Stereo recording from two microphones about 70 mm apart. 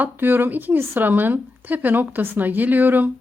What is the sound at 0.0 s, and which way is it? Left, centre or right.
A woman's voice, right.